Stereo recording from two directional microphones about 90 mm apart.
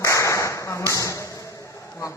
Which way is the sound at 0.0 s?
35° left (ahead or behind).